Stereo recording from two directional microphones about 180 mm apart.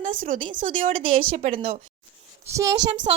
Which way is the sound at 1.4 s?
35° right (ahead or behind).